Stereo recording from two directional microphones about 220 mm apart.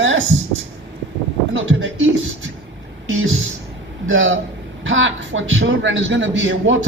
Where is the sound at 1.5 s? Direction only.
60° right (ahead or behind).